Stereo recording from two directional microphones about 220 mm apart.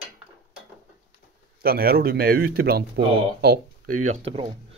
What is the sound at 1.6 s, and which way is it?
Speech, 45° right (ahead or behind).